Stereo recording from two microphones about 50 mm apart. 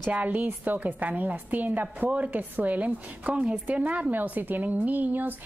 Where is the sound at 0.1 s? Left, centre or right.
Right.